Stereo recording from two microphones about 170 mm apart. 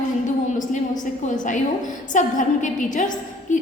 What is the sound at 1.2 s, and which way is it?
A woman's voice, 50° left (ahead or behind).